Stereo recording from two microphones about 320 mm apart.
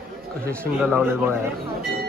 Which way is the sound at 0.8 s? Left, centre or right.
Centre.